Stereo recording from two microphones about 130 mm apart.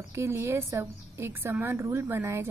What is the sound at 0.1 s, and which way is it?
Speech, 20° right (ahead or behind).